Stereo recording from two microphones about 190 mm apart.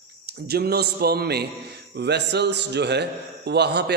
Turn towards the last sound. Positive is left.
turn(degrees=-60)  # may be behind; listen again after turning